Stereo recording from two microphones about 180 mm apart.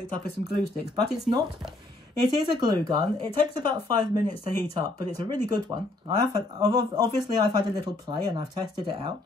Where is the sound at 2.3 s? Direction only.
25° right (ahead or behind).